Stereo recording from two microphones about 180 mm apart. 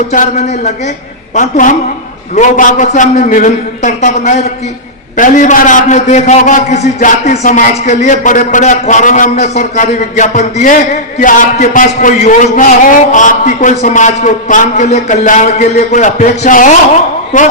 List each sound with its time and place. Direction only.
0.1 s a man's voice: 40° left (ahead or behind)